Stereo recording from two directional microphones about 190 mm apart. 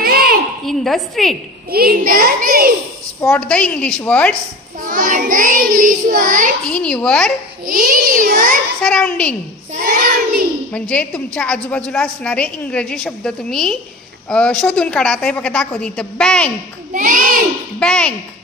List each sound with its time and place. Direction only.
0.0 s a sound: 50° right (ahead or behind)
0.7 s a woman's voice: centre (ahead or behind)
1.7 s child singing: 50° right (ahead or behind)
3.2 s a woman's voice: 10° left (ahead or behind)
4.8 s child singing: 45° right (ahead or behind)
6.6 s a woman's voice: 5° left (ahead or behind)
7.6 s child singing: 45° right (ahead or behind)
8.8 s a woman's voice: 5° left (ahead or behind)
9.8 s child singing: 50° right (ahead or behind)
10.7 s a woman's voice: 5° left (ahead or behind)
16.9 s child singing: 45° right (ahead or behind)
17.7 s a woman's voice: 5° left (ahead or behind)